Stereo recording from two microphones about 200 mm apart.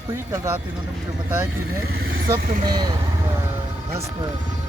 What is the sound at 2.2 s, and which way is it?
Speech, 20° right (ahead or behind).